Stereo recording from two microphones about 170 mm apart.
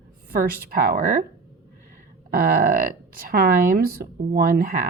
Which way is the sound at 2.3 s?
60° right (ahead or behind).